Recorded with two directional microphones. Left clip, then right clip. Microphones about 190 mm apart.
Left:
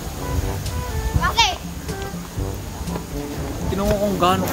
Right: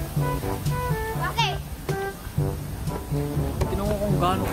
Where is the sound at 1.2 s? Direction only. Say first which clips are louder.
Left 8 dB; 20° left (ahead or behind).